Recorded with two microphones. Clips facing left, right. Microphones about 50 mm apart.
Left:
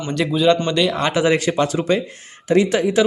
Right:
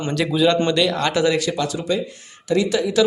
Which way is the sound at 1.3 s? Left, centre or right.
Left.